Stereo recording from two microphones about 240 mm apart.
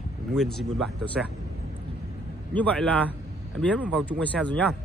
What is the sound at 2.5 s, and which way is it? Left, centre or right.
Speech, centre.